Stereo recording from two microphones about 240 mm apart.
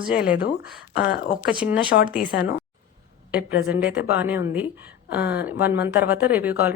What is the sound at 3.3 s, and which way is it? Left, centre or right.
A woman's voice, centre.